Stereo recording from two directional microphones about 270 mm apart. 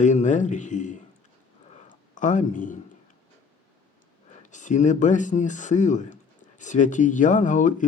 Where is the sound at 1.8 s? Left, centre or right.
Left.